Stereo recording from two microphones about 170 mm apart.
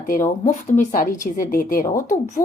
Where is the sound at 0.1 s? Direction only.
50° left (ahead or behind).